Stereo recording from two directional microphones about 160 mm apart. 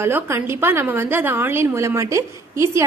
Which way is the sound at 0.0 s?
15° right (ahead or behind).